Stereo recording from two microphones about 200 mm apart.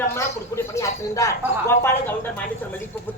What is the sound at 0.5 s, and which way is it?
Speech, 15° left (ahead or behind).